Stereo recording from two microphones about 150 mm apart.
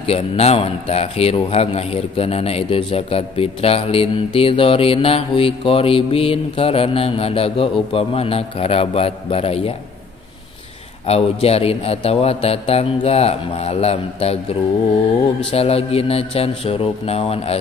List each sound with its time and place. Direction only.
0.0 s a man's voice: 40° left (ahead or behind)
11.1 s a man's voice: 40° left (ahead or behind)
15.5 s a man's voice: 40° left (ahead or behind)